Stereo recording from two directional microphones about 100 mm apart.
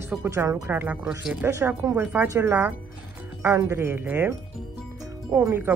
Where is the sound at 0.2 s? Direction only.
30° right (ahead or behind).